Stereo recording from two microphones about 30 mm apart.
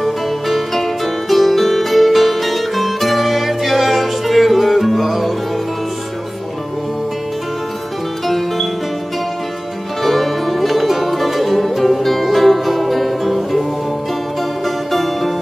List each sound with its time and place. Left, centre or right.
0.0 s music: centre
10.0 s music: centre
14.9 s music: centre